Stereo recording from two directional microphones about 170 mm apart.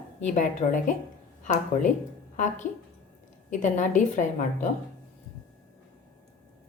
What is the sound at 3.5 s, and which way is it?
A woman's voice, 45° left (ahead or behind).